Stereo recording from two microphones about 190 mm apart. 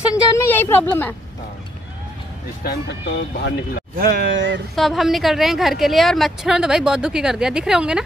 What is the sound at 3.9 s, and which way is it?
Speech, 55° right (ahead or behind).